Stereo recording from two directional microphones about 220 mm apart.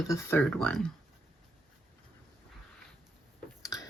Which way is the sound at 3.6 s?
15° left (ahead or behind).